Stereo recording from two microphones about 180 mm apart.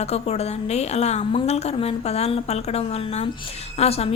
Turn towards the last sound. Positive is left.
turn(degrees=35)  # may be behind; listen again after turning